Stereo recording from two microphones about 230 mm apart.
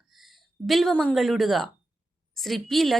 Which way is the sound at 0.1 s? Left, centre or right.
Centre.